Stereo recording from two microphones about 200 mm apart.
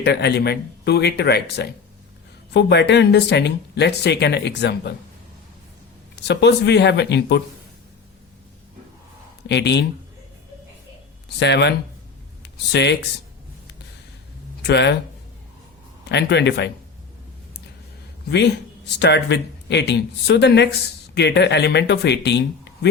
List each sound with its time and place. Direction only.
0.0 s speech: 55° left (ahead or behind)
6.2 s speech: 60° left (ahead or behind)
9.5 s speech: 60° left (ahead or behind)
11.3 s speech: 60° left (ahead or behind)
14.7 s speech: 60° left (ahead or behind)
16.0 s speech: 60° left (ahead or behind)
18.3 s speech: 60° left (ahead or behind)